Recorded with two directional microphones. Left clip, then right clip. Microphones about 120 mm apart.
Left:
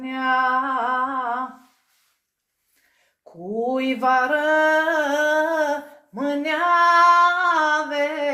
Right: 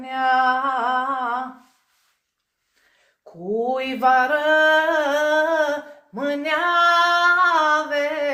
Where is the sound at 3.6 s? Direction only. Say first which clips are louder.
Right 1 dB; 35° left (ahead or behind).